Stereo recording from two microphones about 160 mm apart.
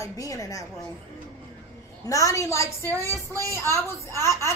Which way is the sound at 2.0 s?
20° left (ahead or behind).